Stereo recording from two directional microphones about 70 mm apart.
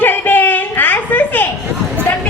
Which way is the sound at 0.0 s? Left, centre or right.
Left.